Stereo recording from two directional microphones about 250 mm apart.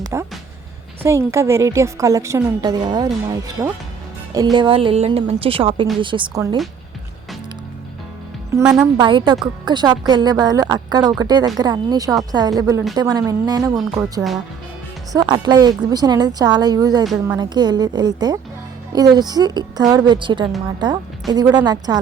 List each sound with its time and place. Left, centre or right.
0.0 s music: centre
1.0 s a woman's voice: centre
8.5 s a woman's voice: centre
9.0 s speech: centre